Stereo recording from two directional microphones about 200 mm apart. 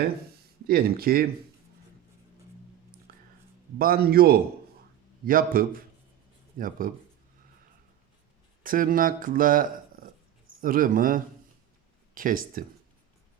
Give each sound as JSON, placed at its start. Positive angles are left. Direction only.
{"t": 0.7, "sound": "speech", "side_deg": -50}
{"t": 3.8, "sound": "speech", "side_deg": -45}
{"t": 8.6, "sound": "speech", "side_deg": -45}